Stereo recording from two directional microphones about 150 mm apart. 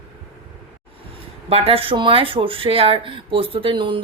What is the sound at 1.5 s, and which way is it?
Speech, 40° right (ahead or behind).